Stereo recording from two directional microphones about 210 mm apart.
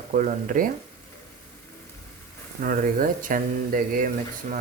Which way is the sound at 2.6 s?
40° right (ahead or behind).